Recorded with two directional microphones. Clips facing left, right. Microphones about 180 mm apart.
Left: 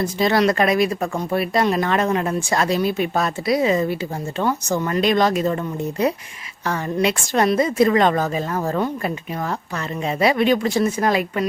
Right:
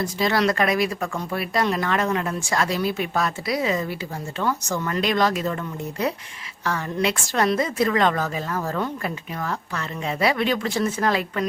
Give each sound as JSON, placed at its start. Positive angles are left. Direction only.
{"t": 0.0, "sound": "a woman's voice", "side_deg": 25}